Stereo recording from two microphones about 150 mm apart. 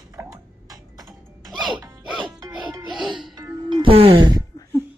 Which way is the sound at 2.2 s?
30° right (ahead or behind).